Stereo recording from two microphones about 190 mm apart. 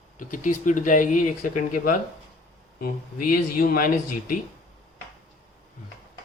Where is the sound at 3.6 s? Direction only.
50° left (ahead or behind).